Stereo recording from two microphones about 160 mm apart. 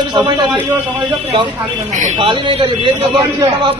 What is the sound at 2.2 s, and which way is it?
A man's voice, 30° right (ahead or behind).